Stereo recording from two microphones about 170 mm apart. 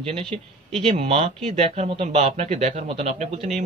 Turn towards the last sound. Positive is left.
turn(degrees=-45)  # may be behind; listen again after turning